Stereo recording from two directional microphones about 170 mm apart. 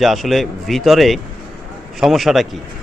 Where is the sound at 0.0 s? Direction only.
Centre (ahead or behind).